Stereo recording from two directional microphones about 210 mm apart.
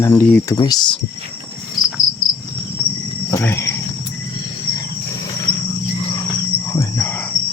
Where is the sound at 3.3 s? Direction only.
10° left (ahead or behind).